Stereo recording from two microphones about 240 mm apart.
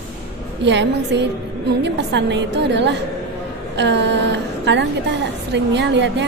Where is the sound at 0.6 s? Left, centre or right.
Right.